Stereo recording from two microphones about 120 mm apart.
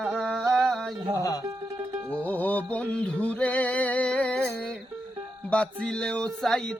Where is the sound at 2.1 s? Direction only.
15° left (ahead or behind).